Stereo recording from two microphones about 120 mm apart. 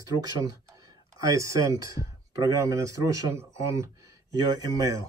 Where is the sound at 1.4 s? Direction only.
25° right (ahead or behind).